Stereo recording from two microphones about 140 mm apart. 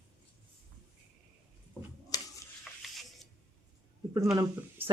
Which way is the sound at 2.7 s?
Centre (ahead or behind).